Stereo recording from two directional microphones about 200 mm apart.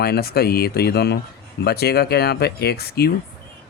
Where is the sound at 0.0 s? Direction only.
50° left (ahead or behind).